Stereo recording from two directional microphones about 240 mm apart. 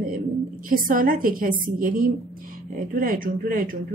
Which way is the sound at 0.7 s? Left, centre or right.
Right.